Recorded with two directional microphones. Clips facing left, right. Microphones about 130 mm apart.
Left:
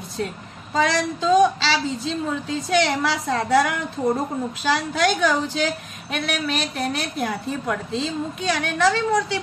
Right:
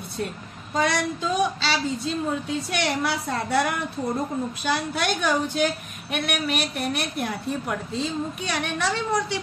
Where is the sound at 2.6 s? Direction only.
90° left.